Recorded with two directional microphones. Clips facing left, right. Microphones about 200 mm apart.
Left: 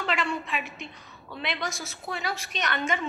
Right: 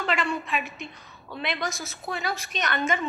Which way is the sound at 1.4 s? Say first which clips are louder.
Right 2 dB; 45° right (ahead or behind).